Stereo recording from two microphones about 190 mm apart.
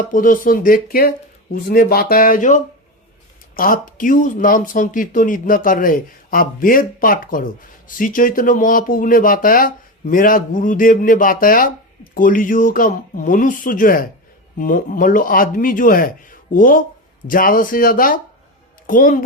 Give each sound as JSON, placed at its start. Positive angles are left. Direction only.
{"t": 0.1, "sound": "speech", "side_deg": 45}